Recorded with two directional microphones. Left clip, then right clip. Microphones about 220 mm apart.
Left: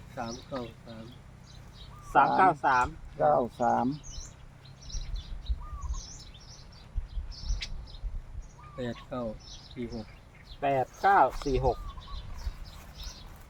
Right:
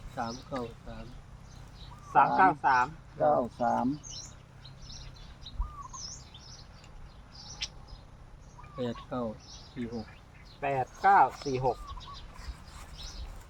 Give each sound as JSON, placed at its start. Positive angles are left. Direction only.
{"t": 0.2, "sound": "speech", "side_deg": 0}
{"t": 2.1, "sound": "speech", "side_deg": 50}
{"t": 7.6, "sound": "a sound", "side_deg": -10}
{"t": 8.8, "sound": "speech", "side_deg": -5}
{"t": 10.6, "sound": "speech", "side_deg": 50}